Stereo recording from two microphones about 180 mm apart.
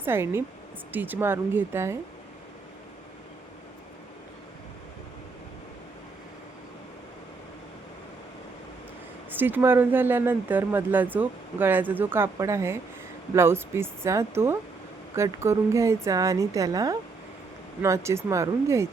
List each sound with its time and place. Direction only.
0.0 s speech: 15° right (ahead or behind)
9.3 s speech: 10° right (ahead or behind)